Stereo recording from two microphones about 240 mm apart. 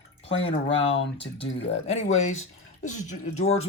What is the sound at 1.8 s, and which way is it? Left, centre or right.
Speech, left.